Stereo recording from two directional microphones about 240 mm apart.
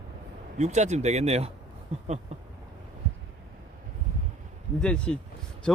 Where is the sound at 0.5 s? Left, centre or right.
Right.